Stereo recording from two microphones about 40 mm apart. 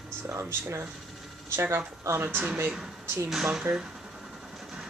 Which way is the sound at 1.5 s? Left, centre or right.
Right.